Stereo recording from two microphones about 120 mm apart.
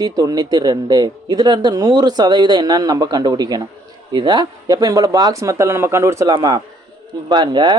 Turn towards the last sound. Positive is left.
turn(degrees=-40)  # may be behind; listen again after turning